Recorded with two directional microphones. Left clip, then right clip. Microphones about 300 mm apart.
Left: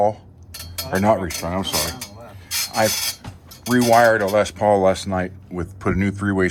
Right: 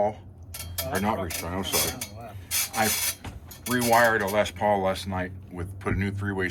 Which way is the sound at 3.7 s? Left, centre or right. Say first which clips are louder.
Left 7 dB; centre.